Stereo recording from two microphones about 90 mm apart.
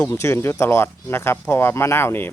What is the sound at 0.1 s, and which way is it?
Speech, 30° left (ahead or behind).